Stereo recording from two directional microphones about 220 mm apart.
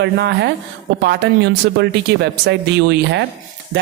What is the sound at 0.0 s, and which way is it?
A woman's voice, 50° right (ahead or behind).